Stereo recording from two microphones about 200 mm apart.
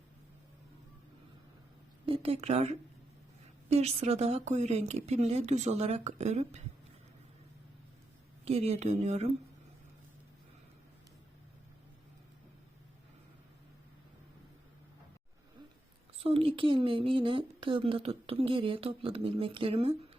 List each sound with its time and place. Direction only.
2.0 s speech: 30° right (ahead or behind)
8.4 s speech: 30° right (ahead or behind)
16.2 s speech: 30° right (ahead or behind)